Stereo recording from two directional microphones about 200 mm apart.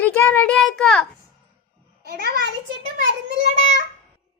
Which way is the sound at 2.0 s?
50° right (ahead or behind).